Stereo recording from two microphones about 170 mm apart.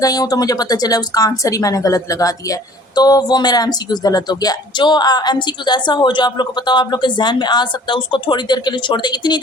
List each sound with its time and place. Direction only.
0.0 s speech: 20° left (ahead or behind)